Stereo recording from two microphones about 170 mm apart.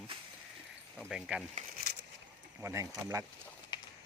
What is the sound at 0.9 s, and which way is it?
Speech, centre (ahead or behind).